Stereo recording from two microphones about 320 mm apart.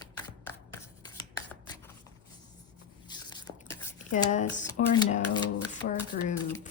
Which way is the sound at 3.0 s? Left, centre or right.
Centre.